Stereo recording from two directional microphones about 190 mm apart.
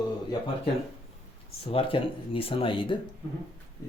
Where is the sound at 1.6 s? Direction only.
30° left (ahead or behind).